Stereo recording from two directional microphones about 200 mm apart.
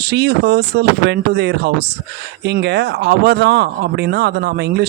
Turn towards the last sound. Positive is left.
turn(degrees=-55)  # may be behind; listen again after turning